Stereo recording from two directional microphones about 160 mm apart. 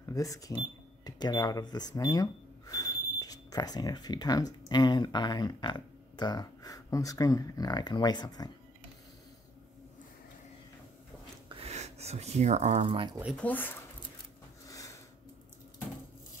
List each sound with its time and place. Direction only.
0.0 s speech: 20° left (ahead or behind)
11.4 s speech: 40° right (ahead or behind)
13.4 s speech: 10° left (ahead or behind)
14.7 s a sound: 20° left (ahead or behind)